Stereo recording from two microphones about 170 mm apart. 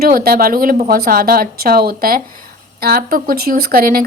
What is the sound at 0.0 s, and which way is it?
Speech, 60° right (ahead or behind).